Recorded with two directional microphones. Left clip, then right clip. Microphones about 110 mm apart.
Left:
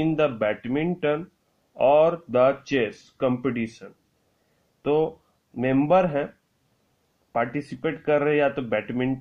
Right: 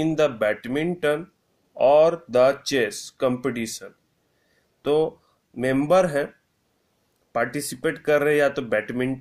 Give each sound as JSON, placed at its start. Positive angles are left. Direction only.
{"t": 0.0, "sound": "speech", "side_deg": -10}
{"t": 7.3, "sound": "speech", "side_deg": -15}